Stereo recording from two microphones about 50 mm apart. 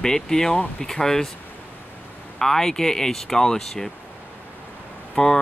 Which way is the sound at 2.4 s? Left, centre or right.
Centre.